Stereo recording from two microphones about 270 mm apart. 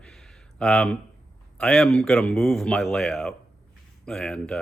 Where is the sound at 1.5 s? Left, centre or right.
Centre.